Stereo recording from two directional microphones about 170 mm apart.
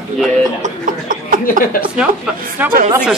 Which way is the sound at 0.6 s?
50° right (ahead or behind).